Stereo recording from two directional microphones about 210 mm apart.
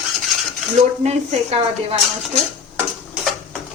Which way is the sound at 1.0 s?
30° right (ahead or behind).